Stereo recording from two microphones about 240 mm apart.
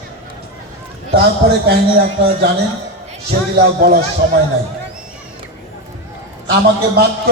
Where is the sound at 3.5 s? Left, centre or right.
Right.